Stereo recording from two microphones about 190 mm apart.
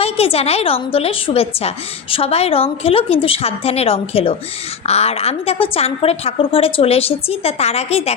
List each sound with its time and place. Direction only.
0.0 s a woman's voice: 30° left (ahead or behind)